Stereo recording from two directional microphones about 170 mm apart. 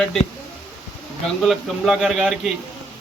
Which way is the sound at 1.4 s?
Centre (ahead or behind).